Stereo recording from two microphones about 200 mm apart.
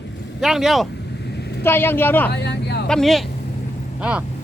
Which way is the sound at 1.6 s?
10° left (ahead or behind).